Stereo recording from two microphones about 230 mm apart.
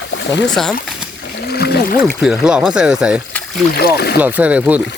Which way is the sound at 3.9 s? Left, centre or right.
Left.